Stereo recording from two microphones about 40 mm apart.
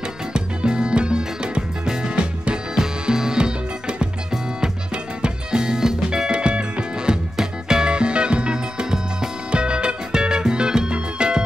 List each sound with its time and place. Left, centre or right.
0.3 s music: right
2.7 s music: centre